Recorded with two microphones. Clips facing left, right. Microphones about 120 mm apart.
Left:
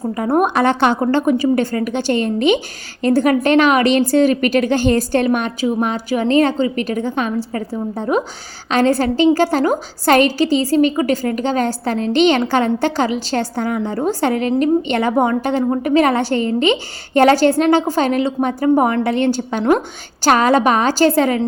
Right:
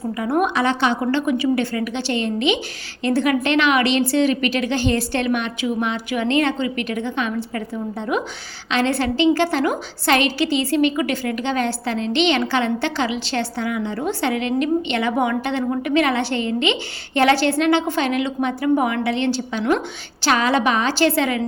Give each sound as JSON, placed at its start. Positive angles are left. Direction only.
{"t": 0.1, "sound": "a woman's voice", "side_deg": 40}
{"t": 1.0, "sound": "a woman's voice", "side_deg": 40}